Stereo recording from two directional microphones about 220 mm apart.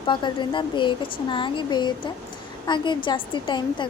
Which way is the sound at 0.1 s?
20° left (ahead or behind).